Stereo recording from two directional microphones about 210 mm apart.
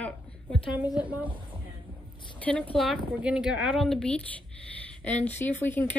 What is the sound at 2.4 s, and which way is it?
Speech, 5° left (ahead or behind).